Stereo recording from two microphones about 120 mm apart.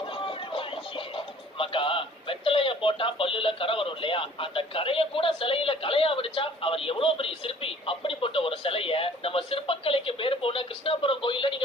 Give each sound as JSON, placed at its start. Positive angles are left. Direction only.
{"t": 0.1, "sound": "speech", "side_deg": 45}